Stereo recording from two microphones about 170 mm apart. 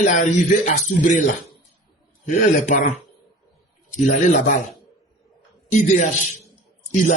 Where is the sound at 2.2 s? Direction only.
50° left (ahead or behind).